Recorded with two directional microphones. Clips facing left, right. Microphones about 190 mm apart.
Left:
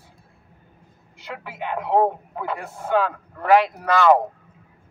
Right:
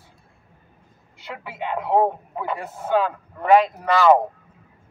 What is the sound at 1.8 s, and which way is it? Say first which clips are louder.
A man's voice: even; centre (ahead or behind).